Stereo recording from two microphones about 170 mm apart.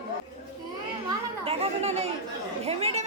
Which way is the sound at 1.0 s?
35° right (ahead or behind).